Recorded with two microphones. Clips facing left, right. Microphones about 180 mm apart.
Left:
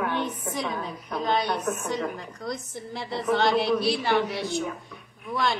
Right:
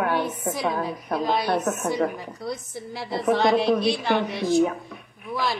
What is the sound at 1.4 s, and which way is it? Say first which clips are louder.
Speech: right 4 dB; 55° right (ahead or behind).